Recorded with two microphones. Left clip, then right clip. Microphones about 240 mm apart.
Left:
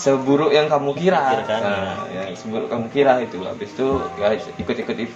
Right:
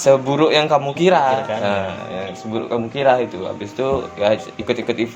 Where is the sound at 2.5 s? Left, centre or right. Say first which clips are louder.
Right 1 dB; right.